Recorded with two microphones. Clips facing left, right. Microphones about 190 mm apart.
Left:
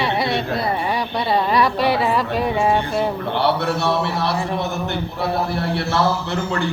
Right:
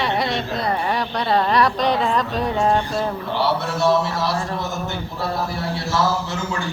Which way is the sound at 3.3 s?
60° left (ahead or behind).